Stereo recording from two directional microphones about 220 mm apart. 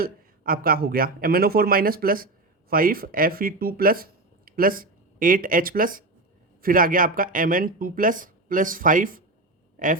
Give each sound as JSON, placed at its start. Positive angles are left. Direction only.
{"t": 0.0, "sound": "speech", "side_deg": -40}